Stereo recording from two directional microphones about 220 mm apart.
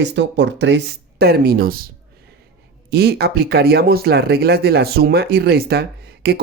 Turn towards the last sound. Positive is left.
turn(degrees=-45)  # may be behind; listen again after turning